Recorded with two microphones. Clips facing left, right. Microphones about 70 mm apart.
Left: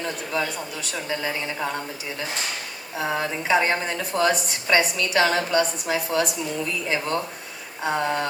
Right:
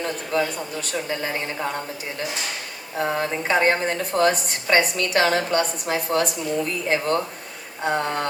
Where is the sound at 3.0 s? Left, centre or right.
Right.